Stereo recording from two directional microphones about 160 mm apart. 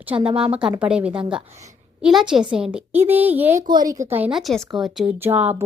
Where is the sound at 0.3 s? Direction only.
5° right (ahead or behind).